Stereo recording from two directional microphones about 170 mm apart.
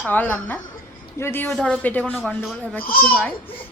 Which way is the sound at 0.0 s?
10° left (ahead or behind).